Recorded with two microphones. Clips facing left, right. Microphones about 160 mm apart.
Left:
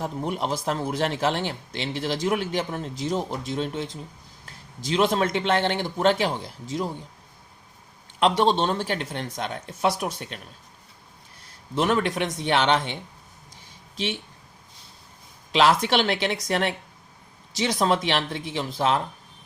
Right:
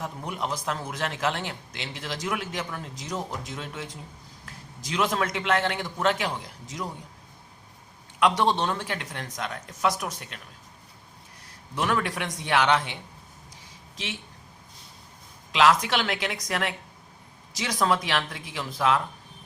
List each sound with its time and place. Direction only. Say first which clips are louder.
0.0 s speech: left 5 dB; 30° left (ahead or behind)
8.2 s speech: left 2 dB; 25° left (ahead or behind)
11.7 s speech: left 4 dB; 25° left (ahead or behind)
15.5 s speech: left 2 dB; 30° left (ahead or behind)